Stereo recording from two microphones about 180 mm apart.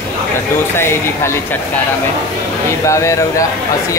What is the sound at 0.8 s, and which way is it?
Speech, 15° left (ahead or behind).